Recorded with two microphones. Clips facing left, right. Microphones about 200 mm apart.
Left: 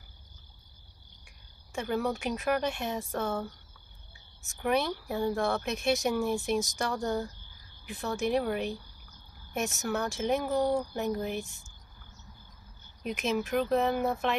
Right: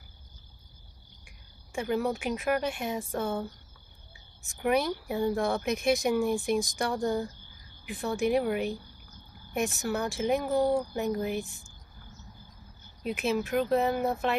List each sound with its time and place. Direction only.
1.7 s speech: 10° right (ahead or behind)
4.5 s speech: 10° right (ahead or behind)
9.8 s speech: 10° right (ahead or behind)
13.0 s speech: 5° right (ahead or behind)